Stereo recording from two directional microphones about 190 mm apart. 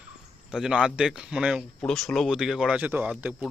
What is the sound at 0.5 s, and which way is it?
Speech, 5° right (ahead or behind).